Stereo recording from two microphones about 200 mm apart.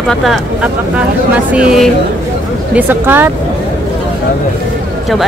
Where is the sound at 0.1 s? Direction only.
Centre (ahead or behind).